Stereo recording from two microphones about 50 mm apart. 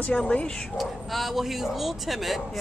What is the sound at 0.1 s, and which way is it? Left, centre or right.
Speech, left.